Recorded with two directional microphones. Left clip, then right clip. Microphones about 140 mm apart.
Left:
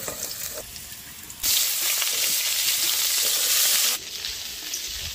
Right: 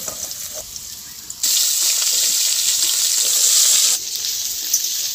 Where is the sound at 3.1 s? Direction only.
Centre (ahead or behind).